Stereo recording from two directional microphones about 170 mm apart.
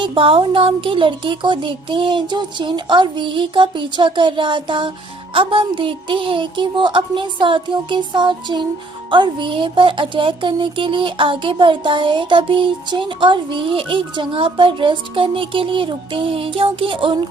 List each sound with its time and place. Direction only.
0.0 s speech: 30° right (ahead or behind)